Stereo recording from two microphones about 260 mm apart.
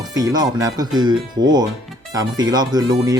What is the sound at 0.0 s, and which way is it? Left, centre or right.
Speech, centre.